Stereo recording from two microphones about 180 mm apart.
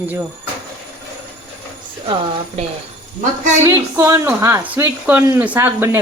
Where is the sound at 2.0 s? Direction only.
30° right (ahead or behind).